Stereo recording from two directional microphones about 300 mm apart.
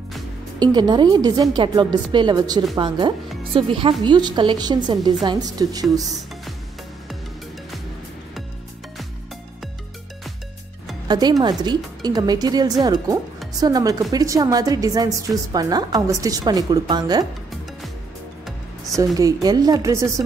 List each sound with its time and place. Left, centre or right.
0.6 s a woman's voice: centre
11.1 s a woman's voice: centre
19.1 s a woman's voice: centre